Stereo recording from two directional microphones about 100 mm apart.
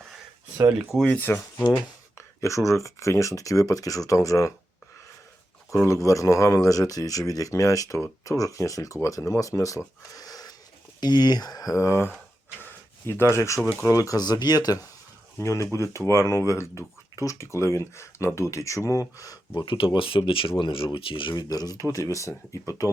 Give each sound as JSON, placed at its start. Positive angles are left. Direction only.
{"t": 0.8, "sound": "speech", "side_deg": 0}
{"t": 1.0, "sound": "speech", "side_deg": 15}
{"t": 1.6, "sound": "speech", "side_deg": 35}
{"t": 5.7, "sound": "speech", "side_deg": 30}
{"t": 13.6, "sound": "speech", "side_deg": 15}
{"t": 13.8, "sound": "speech", "side_deg": 35}
{"t": 15.4, "sound": "speech", "side_deg": 30}
{"t": 19.6, "sound": "speech", "side_deg": 60}
{"t": 21.3, "sound": "speech", "side_deg": 40}